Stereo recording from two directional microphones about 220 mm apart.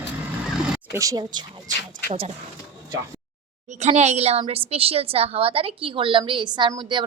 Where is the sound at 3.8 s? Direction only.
30° right (ahead or behind).